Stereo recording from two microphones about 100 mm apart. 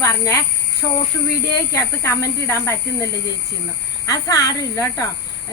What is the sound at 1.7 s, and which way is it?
Speech, 30° left (ahead or behind).